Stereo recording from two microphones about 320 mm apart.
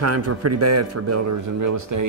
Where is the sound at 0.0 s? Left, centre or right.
Right.